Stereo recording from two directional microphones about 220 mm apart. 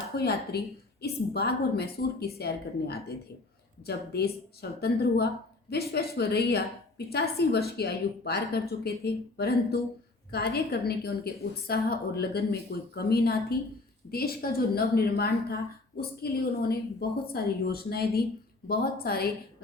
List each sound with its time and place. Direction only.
0.2 s a woman's voice: 45° left (ahead or behind)